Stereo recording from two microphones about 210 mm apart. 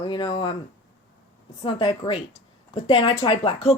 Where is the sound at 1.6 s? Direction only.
25° left (ahead or behind).